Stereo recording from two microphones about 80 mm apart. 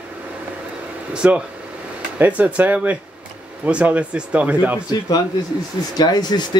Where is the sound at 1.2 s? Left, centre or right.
Centre.